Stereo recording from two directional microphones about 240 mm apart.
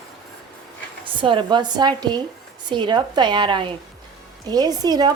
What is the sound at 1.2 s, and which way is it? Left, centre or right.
A woman's voice, centre.